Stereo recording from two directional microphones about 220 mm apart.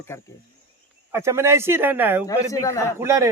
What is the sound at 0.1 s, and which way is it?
Speech, 10° left (ahead or behind).